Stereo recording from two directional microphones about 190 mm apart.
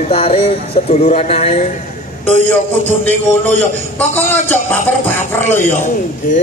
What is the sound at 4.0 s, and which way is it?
Speech, 10° left (ahead or behind).